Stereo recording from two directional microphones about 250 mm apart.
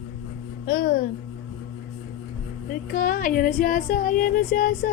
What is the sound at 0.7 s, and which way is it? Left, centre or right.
Music, left.